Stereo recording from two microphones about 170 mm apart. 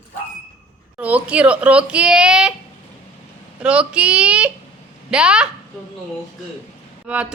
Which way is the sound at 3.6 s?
5° right (ahead or behind).